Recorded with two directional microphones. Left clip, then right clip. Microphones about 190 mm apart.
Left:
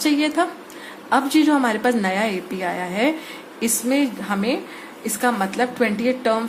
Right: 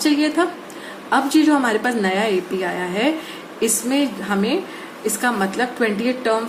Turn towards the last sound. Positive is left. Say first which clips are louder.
# even
turn(degrees=35)  # may be behind; listen again after turning